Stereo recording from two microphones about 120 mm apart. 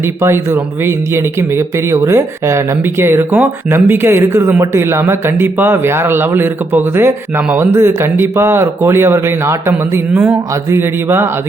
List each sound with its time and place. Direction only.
0.0 s speech: 20° right (ahead or behind)